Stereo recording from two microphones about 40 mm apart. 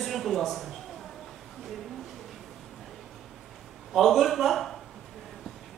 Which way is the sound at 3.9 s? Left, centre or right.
Centre.